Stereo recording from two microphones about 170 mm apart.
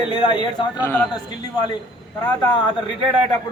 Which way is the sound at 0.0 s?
30° left (ahead or behind).